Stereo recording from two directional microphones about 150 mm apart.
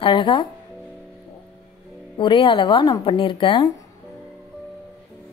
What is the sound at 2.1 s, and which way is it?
A woman's voice, 35° left (ahead or behind).